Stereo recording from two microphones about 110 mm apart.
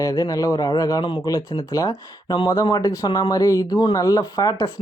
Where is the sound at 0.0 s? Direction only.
35° left (ahead or behind).